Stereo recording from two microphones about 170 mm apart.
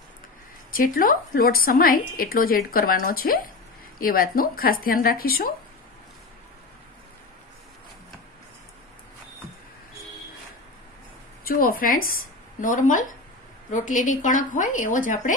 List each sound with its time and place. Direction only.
0.7 s a woman's voice: 55° left (ahead or behind)
11.4 s a woman's voice: 55° left (ahead or behind)